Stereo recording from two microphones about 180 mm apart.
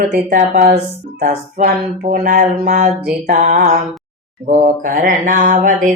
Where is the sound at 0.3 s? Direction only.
50° right (ahead or behind).